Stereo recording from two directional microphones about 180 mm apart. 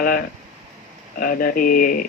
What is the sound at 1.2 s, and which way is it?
Speech, 55° left (ahead or behind).